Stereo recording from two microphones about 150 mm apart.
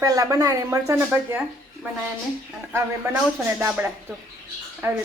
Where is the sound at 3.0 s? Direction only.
15° right (ahead or behind).